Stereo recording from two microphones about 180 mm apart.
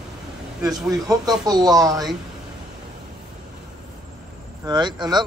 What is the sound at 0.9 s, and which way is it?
Speech, 20° right (ahead or behind).